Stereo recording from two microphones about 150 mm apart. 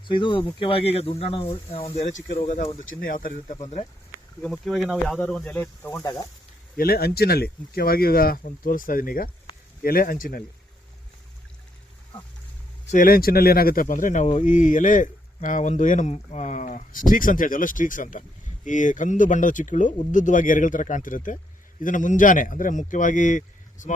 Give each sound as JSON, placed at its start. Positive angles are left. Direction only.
{"t": 0.1, "sound": "speech", "side_deg": 30}
{"t": 2.9, "sound": "speech", "side_deg": 70}
{"t": 4.4, "sound": "speech", "side_deg": 0}
{"t": 6.7, "sound": "speech", "side_deg": 90}
{"t": 12.9, "sound": "speech", "side_deg": 70}